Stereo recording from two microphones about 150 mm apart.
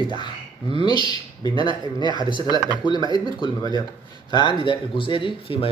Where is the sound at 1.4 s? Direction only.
30° left (ahead or behind).